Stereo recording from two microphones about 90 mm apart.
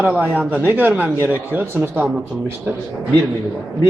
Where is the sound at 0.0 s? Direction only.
15° right (ahead or behind).